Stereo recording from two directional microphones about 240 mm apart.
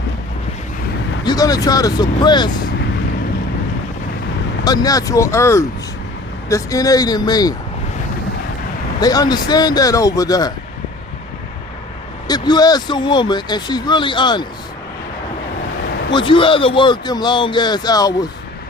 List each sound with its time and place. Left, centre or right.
1.2 s speech: centre
4.6 s speech: centre
9.0 s speech: centre
12.3 s speech: centre
16.1 s speech: left